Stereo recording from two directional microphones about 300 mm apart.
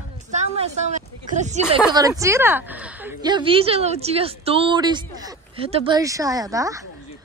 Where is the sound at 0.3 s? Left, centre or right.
Right.